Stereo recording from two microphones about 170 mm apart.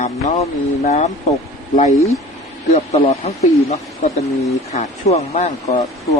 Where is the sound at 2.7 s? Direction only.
40° left (ahead or behind).